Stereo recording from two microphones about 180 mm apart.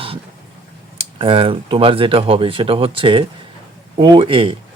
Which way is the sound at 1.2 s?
30° right (ahead or behind).